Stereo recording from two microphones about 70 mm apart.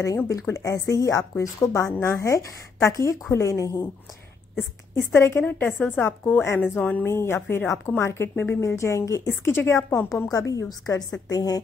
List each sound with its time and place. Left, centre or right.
0.3 s a woman's voice: left
5.1 s a woman's voice: left
5.5 s a woman's voice: left
6.8 s a woman's voice: left
7.1 s a woman's voice: left
10.3 s a woman's voice: left